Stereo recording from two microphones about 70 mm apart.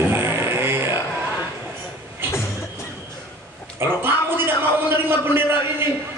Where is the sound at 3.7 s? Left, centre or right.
Right.